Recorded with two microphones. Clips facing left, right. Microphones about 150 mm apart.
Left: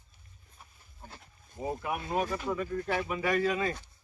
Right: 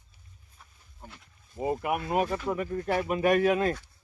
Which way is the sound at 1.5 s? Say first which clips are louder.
Right 5 dB; 15° right (ahead or behind).